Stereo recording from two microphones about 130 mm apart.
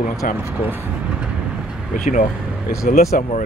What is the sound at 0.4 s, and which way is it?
Speech, 20° right (ahead or behind).